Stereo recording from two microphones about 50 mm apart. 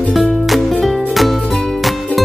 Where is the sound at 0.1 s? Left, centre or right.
Centre.